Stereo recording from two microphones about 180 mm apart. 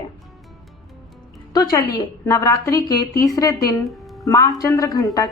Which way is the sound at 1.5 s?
20° left (ahead or behind).